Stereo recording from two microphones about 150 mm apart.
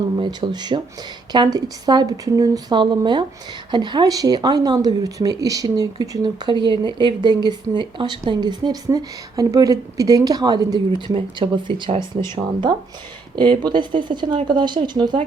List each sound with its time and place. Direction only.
0.2 s speech: 30° right (ahead or behind)